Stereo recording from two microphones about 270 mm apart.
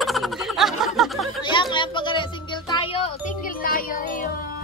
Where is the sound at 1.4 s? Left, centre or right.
Centre.